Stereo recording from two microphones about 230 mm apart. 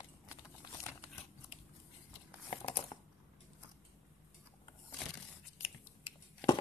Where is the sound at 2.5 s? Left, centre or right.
Left.